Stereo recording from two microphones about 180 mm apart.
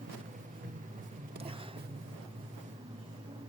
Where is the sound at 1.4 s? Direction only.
30° right (ahead or behind).